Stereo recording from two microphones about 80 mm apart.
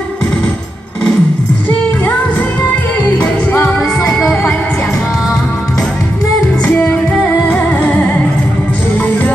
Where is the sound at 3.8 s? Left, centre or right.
Centre.